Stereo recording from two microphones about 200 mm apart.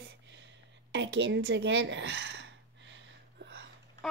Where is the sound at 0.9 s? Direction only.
60° right (ahead or behind).